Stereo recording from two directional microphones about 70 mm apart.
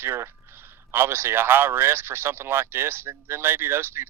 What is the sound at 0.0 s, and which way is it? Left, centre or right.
Speech, right.